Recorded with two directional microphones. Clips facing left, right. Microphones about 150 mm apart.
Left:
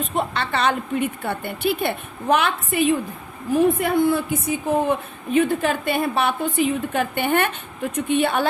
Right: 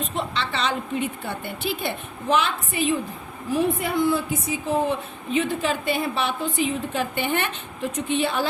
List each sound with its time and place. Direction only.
0.0 s a woman's voice: 55° left (ahead or behind)